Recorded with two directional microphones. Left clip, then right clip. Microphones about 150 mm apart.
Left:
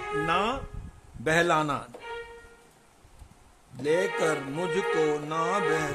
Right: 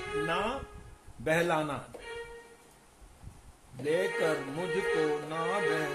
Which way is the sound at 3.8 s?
40° left (ahead or behind).